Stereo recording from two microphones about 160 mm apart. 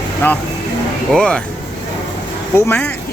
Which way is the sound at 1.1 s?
5° left (ahead or behind).